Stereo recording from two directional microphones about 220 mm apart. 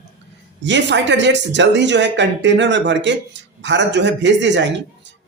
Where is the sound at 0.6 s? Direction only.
55° right (ahead or behind).